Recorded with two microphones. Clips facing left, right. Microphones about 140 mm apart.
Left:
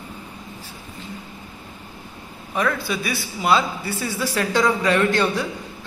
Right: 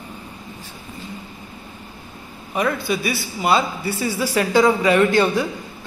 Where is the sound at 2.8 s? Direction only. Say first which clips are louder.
Right 3 dB; centre (ahead or behind).